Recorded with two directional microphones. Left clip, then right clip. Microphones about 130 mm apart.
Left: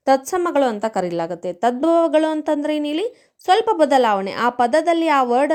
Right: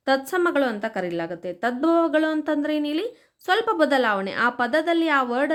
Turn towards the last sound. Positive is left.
turn(degrees=30)  # may be behind; listen again after turning